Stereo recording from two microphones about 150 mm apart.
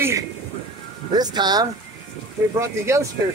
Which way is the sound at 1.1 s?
30° right (ahead or behind).